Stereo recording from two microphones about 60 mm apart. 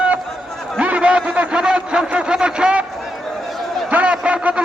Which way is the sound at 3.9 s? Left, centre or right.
Right.